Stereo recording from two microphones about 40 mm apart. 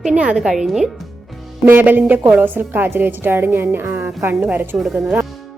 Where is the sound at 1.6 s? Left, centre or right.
Right.